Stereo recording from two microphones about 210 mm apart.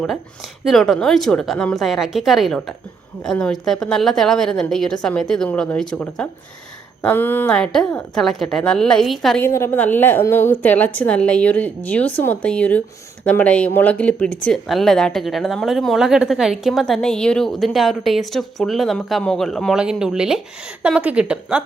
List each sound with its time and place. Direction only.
0.6 s a woman's voice: centre (ahead or behind)